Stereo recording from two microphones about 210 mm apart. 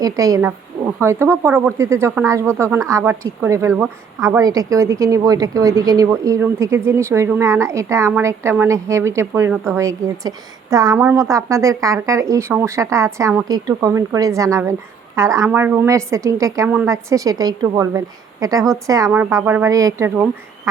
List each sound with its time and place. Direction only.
0.0 s speech: 15° right (ahead or behind)